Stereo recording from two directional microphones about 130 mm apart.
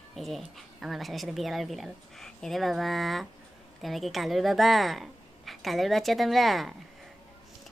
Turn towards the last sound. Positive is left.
turn(degrees=0)  # may be behind; listen again after turning